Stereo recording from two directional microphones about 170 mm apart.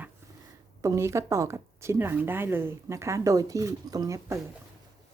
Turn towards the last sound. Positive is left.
turn(degrees=-20)  # may be behind; listen again after turning